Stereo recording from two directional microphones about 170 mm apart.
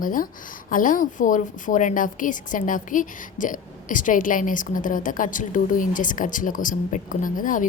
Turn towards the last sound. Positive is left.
turn(degrees=50)  # may be behind; listen again after turning